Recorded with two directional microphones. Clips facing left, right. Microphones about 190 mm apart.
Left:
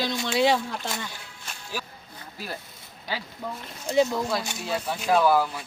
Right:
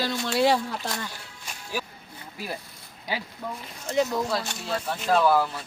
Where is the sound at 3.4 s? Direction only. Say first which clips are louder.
Left 1 dB; centre (ahead or behind).